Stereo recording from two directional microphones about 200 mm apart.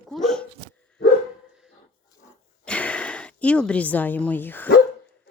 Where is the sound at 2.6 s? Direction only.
5° left (ahead or behind).